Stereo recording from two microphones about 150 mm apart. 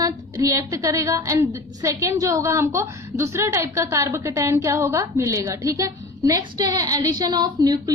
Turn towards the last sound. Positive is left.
turn(degrees=-25)  # may be behind; listen again after turning